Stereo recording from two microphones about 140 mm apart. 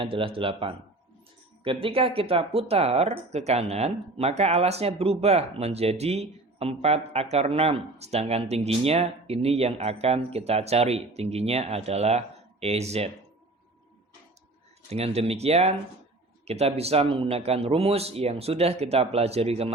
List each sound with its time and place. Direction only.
0.0 s speech: 40° right (ahead or behind)
14.8 s speech: 50° right (ahead or behind)